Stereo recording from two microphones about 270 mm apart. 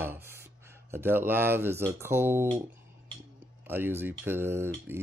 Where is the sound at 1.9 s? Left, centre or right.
Centre.